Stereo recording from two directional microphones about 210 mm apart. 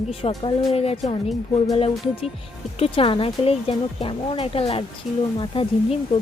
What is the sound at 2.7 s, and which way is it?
Speech, 25° left (ahead or behind).